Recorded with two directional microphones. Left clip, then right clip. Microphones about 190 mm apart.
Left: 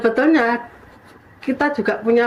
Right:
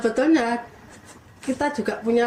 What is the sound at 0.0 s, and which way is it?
Speech, 20° left (ahead or behind).